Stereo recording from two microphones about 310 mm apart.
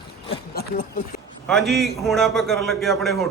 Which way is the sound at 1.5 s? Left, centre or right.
Centre.